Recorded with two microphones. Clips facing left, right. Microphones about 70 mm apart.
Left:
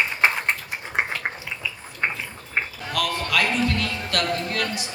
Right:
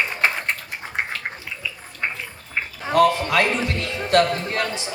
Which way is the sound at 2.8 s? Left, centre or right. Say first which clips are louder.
Right 14 dB; right.